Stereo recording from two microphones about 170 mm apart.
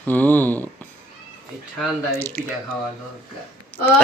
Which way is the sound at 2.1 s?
15° left (ahead or behind).